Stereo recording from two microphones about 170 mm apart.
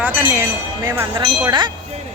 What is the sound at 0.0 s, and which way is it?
Speech, 10° right (ahead or behind).